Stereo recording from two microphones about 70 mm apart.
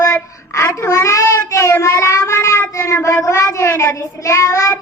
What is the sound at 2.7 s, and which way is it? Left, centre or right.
Speech, left.